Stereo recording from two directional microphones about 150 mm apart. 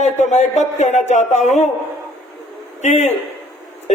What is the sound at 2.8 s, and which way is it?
Speech, 50° left (ahead or behind).